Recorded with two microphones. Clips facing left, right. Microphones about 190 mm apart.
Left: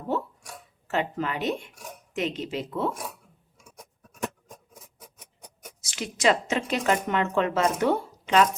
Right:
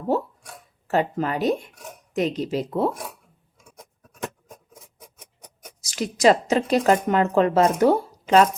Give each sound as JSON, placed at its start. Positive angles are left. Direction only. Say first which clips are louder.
{"t": 0.9, "sound": "speech", "louder": "right 5 dB", "side_deg": -40}
{"t": 5.8, "sound": "speech", "louder": "right 6 dB", "side_deg": -40}